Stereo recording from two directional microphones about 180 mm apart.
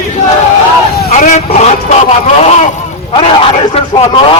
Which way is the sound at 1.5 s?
35° left (ahead or behind).